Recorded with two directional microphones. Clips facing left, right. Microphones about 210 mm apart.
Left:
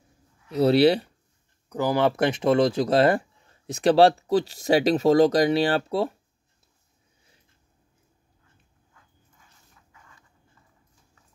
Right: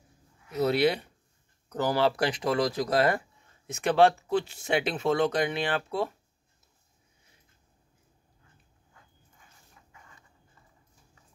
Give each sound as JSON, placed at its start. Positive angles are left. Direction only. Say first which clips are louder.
{"t": 0.5, "sound": "speech", "louder": "left 7 dB", "side_deg": 30}
{"t": 1.7, "sound": "speech", "louder": "left 3 dB", "side_deg": 10}